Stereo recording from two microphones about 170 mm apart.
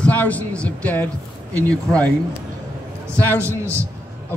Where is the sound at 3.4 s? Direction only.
15° right (ahead or behind).